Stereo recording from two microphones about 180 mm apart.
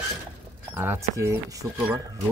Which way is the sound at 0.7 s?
15° right (ahead or behind).